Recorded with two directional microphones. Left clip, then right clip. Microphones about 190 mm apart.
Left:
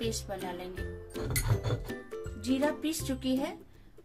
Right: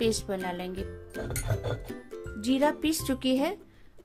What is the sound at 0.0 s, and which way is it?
Speech, 50° right (ahead or behind).